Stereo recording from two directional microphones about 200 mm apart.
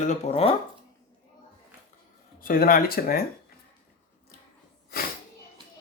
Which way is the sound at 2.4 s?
45° left (ahead or behind).